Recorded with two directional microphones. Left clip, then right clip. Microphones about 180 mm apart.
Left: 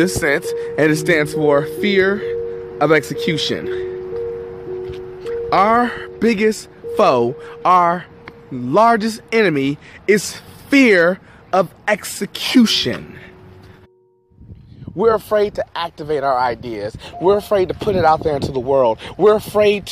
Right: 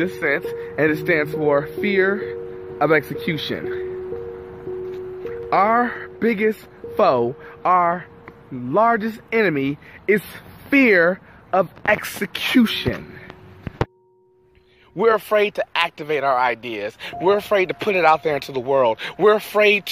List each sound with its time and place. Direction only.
0.0 s speech: 40° left (ahead or behind); by 3.8 s 25° left (ahead or behind)
5.2 s speech: 30° left (ahead or behind)
15.1 s speech: 5° left (ahead or behind)
15.5 s speech: 25° left (ahead or behind)